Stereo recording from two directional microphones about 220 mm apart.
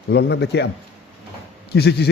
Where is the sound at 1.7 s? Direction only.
50° left (ahead or behind).